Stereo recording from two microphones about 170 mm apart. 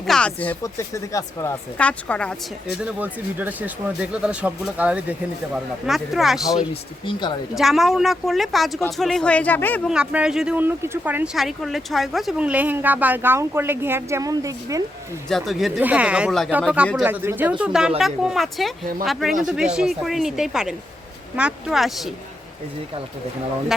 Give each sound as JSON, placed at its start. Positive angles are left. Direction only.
{"t": 0.0, "sound": "speech", "side_deg": 5}
{"t": 0.6, "sound": "speech", "side_deg": 20}
{"t": 1.8, "sound": "speech", "side_deg": 5}
{"t": 2.8, "sound": "speech", "side_deg": -10}
{"t": 6.6, "sound": "speech", "side_deg": 30}
{"t": 7.5, "sound": "speech", "side_deg": 0}
{"t": 9.8, "sound": "speech", "side_deg": -5}
{"t": 15.3, "sound": "speech", "side_deg": 0}